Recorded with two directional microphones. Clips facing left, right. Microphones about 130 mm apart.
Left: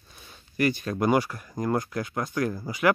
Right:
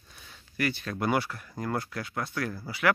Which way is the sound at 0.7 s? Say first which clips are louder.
Left 3 dB; 15° left (ahead or behind).